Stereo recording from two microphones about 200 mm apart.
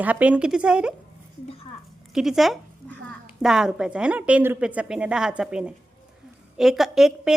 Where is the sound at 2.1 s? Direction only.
Centre (ahead or behind).